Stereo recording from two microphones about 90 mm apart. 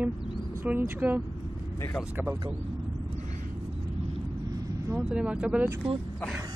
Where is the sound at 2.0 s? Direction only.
5° left (ahead or behind).